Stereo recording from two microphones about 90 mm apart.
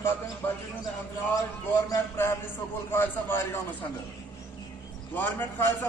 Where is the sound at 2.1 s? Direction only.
25° left (ahead or behind).